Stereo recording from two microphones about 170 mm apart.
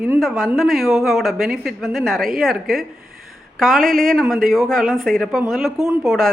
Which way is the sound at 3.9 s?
55° right (ahead or behind).